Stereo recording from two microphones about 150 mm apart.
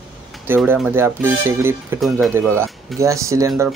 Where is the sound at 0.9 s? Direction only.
15° right (ahead or behind).